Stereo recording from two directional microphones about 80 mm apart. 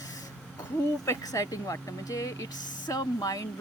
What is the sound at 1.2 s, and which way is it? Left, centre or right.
Speech, left.